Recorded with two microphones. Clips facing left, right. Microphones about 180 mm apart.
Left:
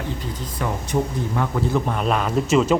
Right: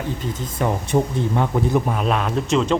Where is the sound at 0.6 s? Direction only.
20° right (ahead or behind).